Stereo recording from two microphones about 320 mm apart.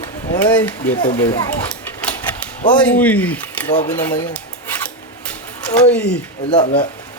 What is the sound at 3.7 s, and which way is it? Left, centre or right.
Speech, left.